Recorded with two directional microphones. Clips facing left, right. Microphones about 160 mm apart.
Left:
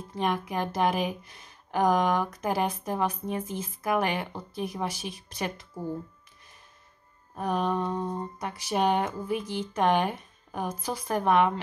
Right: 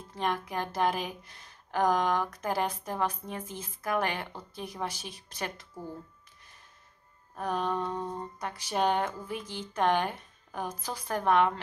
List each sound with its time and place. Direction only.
0.1 s speech: 15° left (ahead or behind)
7.3 s speech: 15° left (ahead or behind)